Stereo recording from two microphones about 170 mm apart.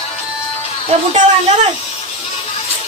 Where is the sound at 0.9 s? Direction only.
40° right (ahead or behind).